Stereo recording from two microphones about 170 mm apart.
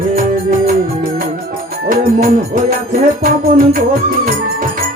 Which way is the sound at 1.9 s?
55° right (ahead or behind).